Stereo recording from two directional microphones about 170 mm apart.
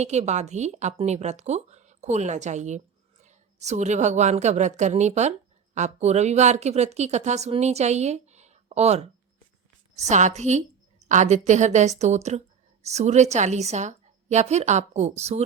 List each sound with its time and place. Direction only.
0.0 s a woman's voice: 40° right (ahead or behind)